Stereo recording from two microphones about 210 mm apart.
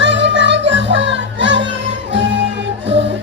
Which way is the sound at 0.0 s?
60° right (ahead or behind).